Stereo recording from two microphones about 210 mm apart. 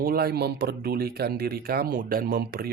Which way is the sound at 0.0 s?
45° right (ahead or behind).